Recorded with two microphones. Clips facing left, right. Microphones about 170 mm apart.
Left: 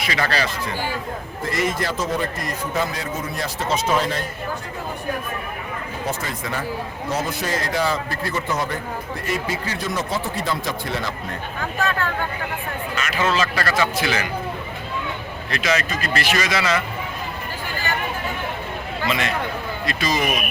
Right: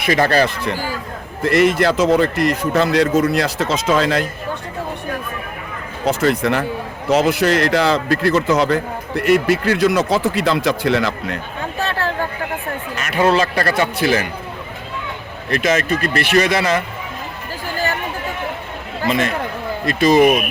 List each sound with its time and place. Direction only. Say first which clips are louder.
0.0 s a man's voice: right 8 dB; 50° right (ahead or behind)
1.4 s a man's voice: right 10 dB; 70° right (ahead or behind); by 4.3 s 90° right
6.1 s speech: right 13 dB; 75° right (ahead or behind)
7.1 s a man's voice: right 11 dB; 80° right
11.8 s a sound: right 2 dB; 35° right (ahead or behind)
13.4 s speech: right 4 dB; 35° right (ahead or behind)
13.9 s a man's voice: right 6 dB; 50° right (ahead or behind)
15.4 s a man's voice: right 6 dB; 50° right (ahead or behind)
19.0 s a man's voice: right 5 dB; 45° right (ahead or behind)